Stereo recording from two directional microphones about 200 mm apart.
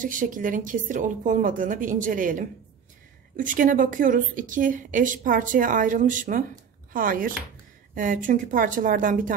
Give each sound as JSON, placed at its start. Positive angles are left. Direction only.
{"t": 0.0, "sound": "a woman's voice", "side_deg": -40}